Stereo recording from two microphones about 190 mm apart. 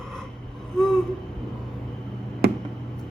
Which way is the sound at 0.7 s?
5° left (ahead or behind).